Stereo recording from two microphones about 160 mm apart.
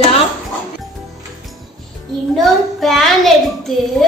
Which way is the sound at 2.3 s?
Centre (ahead or behind).